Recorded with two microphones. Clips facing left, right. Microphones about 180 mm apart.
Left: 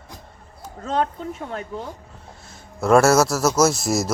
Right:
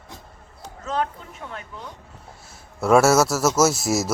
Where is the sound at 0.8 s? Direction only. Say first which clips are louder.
Left 3 dB; 35° left (ahead or behind).